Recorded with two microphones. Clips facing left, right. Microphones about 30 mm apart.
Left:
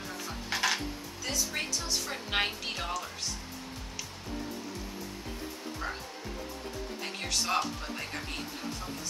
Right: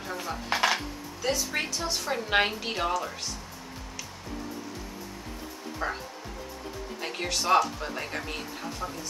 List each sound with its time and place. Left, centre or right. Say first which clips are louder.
0.1 s music: right 6 dB; right
5.8 s speech: right 6 dB; right
7.0 s speech: right 3 dB; centre